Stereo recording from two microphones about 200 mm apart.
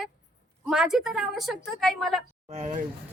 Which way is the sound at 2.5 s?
35° right (ahead or behind).